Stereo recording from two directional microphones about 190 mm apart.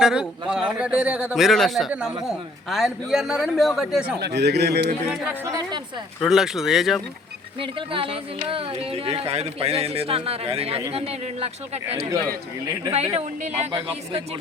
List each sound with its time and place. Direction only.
0.0 s a man's voice: 5° right (ahead or behind)
4.2 s a man's voice: 60° right (ahead or behind)
5.1 s a man's voice: 5° right (ahead or behind)
7.6 s speech: 30° right (ahead or behind)